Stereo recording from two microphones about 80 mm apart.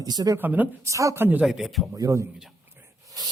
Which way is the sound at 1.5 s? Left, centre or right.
Centre.